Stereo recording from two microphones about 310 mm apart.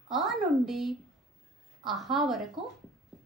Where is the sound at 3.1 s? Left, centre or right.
Centre.